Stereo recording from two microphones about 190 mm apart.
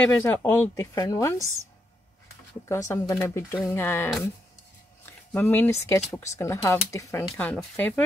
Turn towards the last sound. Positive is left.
turn(degrees=5)  # may be behind; listen again after turning